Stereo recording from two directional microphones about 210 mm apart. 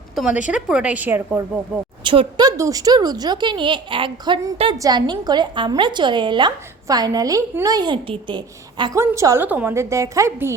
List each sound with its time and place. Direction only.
0.2 s a woman's voice: 5° right (ahead or behind)
2.0 s speech: 20° right (ahead or behind)